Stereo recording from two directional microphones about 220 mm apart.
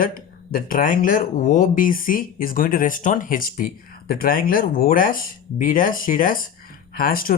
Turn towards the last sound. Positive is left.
turn(degrees=40)  # may be behind; listen again after turning